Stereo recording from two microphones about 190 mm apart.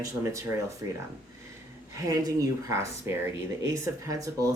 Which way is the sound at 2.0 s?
20° right (ahead or behind).